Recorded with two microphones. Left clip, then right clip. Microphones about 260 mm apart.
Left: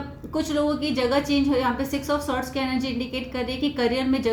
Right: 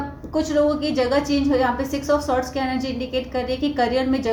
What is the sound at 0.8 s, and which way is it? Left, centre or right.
A woman's voice, centre.